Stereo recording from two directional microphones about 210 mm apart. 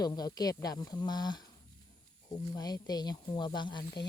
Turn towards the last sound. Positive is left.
turn(degrees=20)  # may be behind; listen again after turning